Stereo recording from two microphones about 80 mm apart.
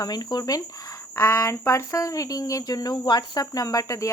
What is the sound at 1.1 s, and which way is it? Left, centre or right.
Speech, left.